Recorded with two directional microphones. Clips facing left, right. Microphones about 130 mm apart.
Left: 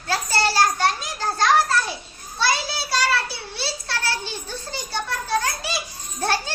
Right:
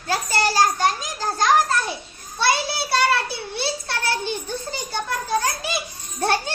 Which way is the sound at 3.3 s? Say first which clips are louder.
Right 4 dB; 55° right (ahead or behind).